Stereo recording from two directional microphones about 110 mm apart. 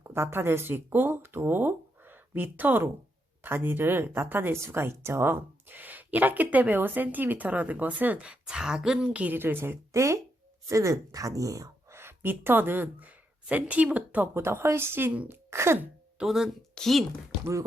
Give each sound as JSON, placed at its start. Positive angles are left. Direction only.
{"t": 0.0, "sound": "speech", "side_deg": -20}
{"t": 15.4, "sound": "wail", "side_deg": -25}
{"t": 16.1, "sound": "speech", "side_deg": -5}